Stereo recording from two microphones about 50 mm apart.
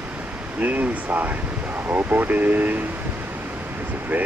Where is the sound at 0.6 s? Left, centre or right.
Right.